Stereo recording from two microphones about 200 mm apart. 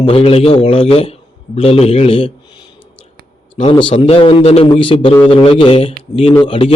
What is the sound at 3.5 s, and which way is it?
A man's voice, 25° left (ahead or behind).